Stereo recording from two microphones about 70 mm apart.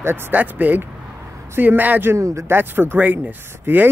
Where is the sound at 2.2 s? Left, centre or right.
Right.